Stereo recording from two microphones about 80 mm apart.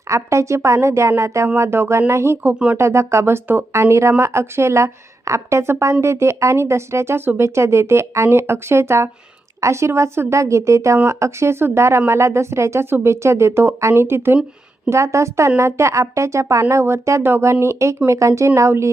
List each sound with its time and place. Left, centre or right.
0.1 s a woman's voice: right
3.7 s a woman's voice: right